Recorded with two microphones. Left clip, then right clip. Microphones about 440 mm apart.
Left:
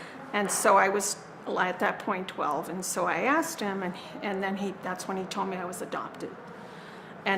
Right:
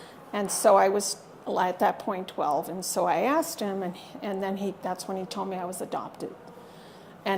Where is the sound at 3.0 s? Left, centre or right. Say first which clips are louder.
Right 2 dB; right.